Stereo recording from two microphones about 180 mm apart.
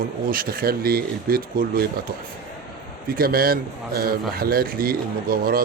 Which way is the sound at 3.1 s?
55° right (ahead or behind).